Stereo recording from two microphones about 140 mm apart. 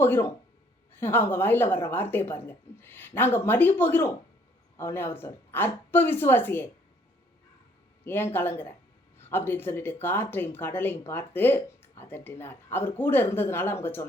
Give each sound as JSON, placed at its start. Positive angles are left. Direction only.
{"t": 0.0, "sound": "speech", "side_deg": 15}
{"t": 8.0, "sound": "speech", "side_deg": 15}